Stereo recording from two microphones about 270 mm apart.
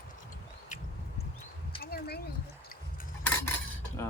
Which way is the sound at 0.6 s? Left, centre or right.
Left.